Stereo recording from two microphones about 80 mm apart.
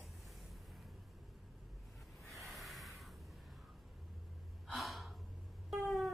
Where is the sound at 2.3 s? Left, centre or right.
Centre.